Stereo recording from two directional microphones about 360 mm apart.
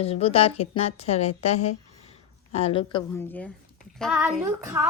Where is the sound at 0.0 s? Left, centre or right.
Centre.